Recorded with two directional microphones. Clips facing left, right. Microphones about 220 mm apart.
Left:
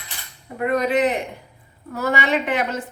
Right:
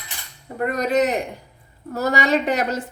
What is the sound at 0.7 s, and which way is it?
Speech, 40° right (ahead or behind).